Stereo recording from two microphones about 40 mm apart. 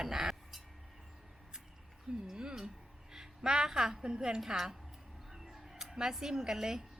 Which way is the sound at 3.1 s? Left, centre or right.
Centre.